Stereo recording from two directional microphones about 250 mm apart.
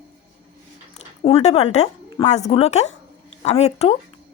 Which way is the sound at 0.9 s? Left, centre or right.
Left.